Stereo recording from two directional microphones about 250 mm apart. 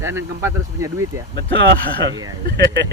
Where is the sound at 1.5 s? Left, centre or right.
Right.